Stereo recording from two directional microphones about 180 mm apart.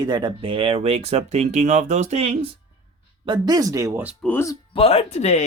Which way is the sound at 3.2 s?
25° right (ahead or behind).